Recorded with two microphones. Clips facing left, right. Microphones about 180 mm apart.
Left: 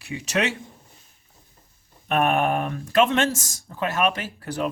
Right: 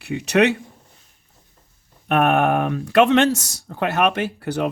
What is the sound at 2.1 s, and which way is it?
Speech, 60° right (ahead or behind).